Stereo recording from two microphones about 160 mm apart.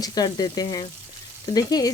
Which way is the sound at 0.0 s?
25° left (ahead or behind).